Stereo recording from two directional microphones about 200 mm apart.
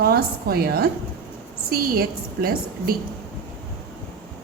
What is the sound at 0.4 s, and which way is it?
A woman's voice, 50° right (ahead or behind).